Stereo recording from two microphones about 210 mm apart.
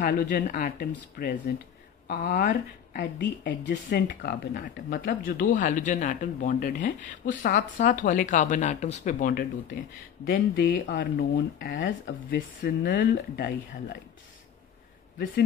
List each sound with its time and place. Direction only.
0.0 s speech: 40° left (ahead or behind)